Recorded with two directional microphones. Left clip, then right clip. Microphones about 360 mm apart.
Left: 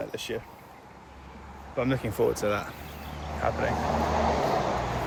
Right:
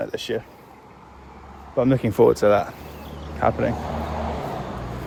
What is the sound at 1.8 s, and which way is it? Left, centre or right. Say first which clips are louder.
Speech: right 9 dB; centre.